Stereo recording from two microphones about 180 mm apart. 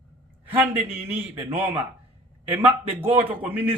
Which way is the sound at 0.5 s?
10° right (ahead or behind).